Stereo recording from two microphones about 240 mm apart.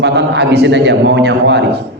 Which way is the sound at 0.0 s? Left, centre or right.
Right.